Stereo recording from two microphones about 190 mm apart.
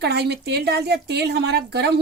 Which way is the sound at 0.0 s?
60° right (ahead or behind).